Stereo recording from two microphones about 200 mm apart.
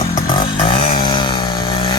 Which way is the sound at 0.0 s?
20° left (ahead or behind).